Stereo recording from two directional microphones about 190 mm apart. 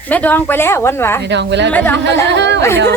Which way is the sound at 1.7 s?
10° left (ahead or behind).